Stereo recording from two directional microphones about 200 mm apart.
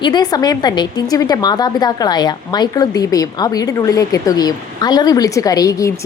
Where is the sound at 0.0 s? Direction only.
20° left (ahead or behind).